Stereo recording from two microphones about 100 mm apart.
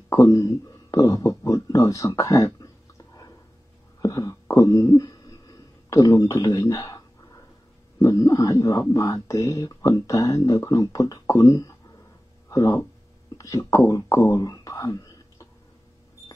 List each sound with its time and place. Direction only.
0.1 s speech: 35° left (ahead or behind)
4.0 s a sound: 35° left (ahead or behind)
8.0 s speech: 35° left (ahead or behind)